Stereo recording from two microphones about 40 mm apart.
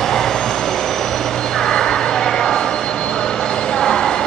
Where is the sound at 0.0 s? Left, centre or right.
Centre.